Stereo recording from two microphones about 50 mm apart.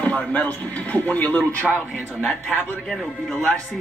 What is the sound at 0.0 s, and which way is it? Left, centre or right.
Speech, left.